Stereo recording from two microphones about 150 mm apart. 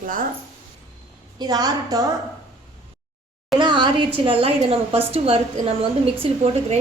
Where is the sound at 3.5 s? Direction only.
30° right (ahead or behind).